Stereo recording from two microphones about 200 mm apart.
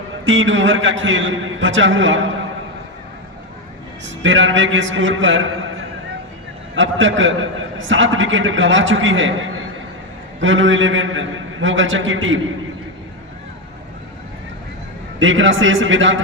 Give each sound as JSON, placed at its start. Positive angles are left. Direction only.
{"t": 0.3, "sound": "a man's voice", "side_deg": -70}
{"t": 4.0, "sound": "a man's voice", "side_deg": -70}
{"t": 6.7, "sound": "a man's voice", "side_deg": -70}
{"t": 15.2, "sound": "a man's voice", "side_deg": -70}